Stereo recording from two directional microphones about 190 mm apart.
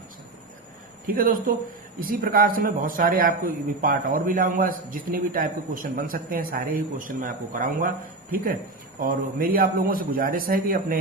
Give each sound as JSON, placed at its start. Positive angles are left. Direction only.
{"t": 1.0, "sound": "speech", "side_deg": -45}